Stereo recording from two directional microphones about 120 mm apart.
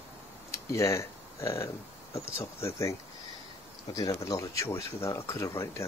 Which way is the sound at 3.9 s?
30° left (ahead or behind).